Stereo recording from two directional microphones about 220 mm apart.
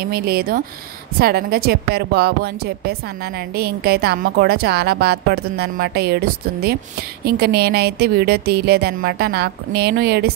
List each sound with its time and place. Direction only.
0.0 s speech: 45° right (ahead or behind)